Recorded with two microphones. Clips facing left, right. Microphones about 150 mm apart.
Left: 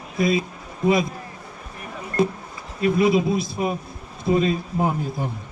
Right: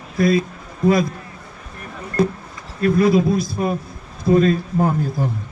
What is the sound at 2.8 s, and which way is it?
A man's voice, 5° left (ahead or behind).